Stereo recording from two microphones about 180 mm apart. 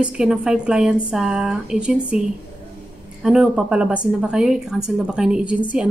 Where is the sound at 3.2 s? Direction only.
5° right (ahead or behind).